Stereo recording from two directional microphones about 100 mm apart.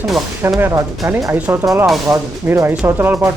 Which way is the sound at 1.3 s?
15° right (ahead or behind).